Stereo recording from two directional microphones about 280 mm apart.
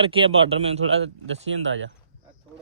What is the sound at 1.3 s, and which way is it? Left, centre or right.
Speech, right.